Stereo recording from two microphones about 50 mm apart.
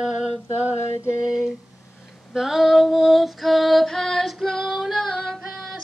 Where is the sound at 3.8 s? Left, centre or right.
Centre.